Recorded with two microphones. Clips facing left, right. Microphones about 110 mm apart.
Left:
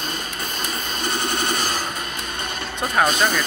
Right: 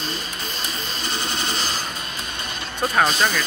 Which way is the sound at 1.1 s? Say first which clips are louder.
Left 4 dB; 55° left (ahead or behind).